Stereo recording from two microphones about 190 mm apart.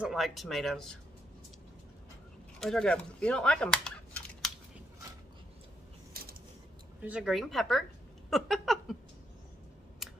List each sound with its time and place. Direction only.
0.0 s speech: centre (ahead or behind)
2.6 s speech: 5° left (ahead or behind)
7.0 s speech: 5° right (ahead or behind)
8.3 s a sound: centre (ahead or behind)